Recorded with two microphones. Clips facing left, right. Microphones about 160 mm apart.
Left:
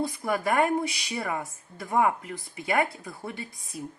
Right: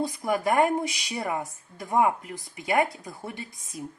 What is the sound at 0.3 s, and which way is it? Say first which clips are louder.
Speech: right 2 dB; 15° right (ahead or behind).